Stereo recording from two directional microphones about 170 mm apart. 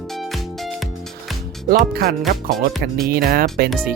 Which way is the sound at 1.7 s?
65° right (ahead or behind).